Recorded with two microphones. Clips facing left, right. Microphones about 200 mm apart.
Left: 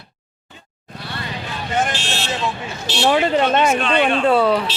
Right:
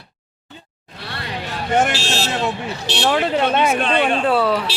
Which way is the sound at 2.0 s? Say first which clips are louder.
Right 3 dB; 40° right (ahead or behind).